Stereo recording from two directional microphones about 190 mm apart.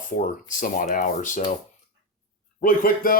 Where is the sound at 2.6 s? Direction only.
45° left (ahead or behind).